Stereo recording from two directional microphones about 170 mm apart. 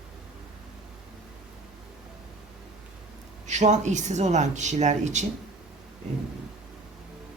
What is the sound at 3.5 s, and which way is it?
Speech, 45° right (ahead or behind).